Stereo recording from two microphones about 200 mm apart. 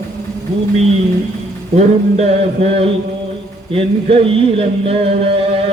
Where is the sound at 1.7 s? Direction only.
35° right (ahead or behind).